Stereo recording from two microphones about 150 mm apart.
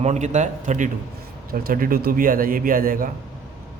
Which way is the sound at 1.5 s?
75° right (ahead or behind).